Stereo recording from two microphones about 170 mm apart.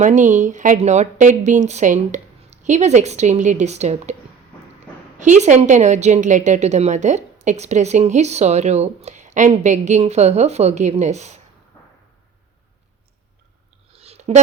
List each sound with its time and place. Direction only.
0.0 s a woman's voice: 45° right (ahead or behind)
5.1 s a woman's voice: 45° right (ahead or behind)
13.9 s a sound: 40° right (ahead or behind)